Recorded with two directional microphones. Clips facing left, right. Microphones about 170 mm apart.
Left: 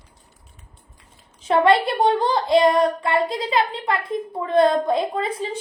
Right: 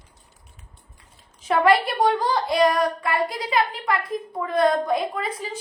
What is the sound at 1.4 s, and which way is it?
Speech, 30° left (ahead or behind).